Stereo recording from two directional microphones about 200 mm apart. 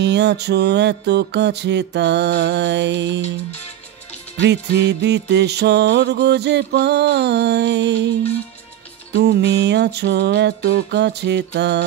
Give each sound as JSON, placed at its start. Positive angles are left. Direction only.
{"t": 0.0, "sound": "music", "side_deg": -60}
{"t": 4.4, "sound": "music", "side_deg": -60}
{"t": 9.1, "sound": "music", "side_deg": -55}